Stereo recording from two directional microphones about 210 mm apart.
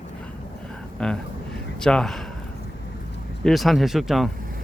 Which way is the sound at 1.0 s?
5° left (ahead or behind).